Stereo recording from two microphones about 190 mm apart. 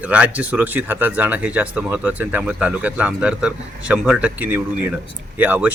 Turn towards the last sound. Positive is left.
turn(degrees=-10)  # may be behind; listen again after turning